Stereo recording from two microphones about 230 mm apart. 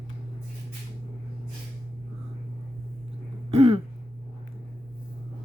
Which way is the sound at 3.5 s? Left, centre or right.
Right.